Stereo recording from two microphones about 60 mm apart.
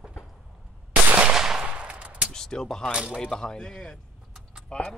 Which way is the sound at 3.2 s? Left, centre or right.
Centre.